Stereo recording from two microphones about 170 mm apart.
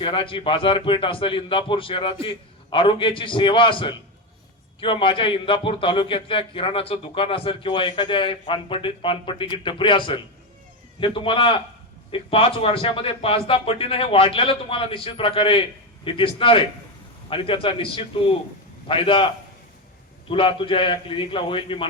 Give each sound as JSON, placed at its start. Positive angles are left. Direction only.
{"t": 0.0, "sound": "a man's voice", "side_deg": 30}